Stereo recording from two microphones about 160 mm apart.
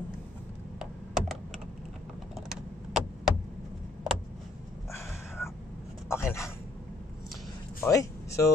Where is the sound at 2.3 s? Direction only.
Centre (ahead or behind).